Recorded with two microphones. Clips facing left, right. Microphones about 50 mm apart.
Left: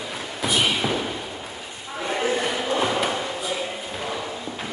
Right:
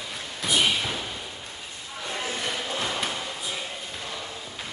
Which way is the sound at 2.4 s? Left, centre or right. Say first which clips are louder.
Left 6 dB; centre.